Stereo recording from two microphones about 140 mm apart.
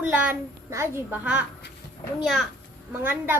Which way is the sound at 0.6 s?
20° right (ahead or behind).